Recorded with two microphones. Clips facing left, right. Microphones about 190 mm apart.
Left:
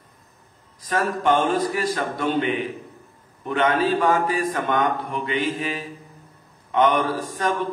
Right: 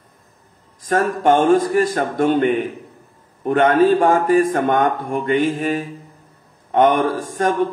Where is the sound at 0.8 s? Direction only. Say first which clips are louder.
Right 5 dB; 50° right (ahead or behind).